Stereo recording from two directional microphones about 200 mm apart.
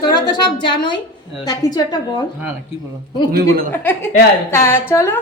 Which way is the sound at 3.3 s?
50° right (ahead or behind).